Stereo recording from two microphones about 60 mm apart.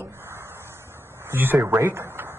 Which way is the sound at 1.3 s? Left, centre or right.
Right.